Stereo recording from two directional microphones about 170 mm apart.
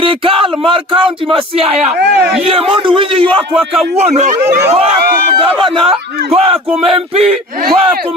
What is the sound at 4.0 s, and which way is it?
Speech, 40° right (ahead or behind).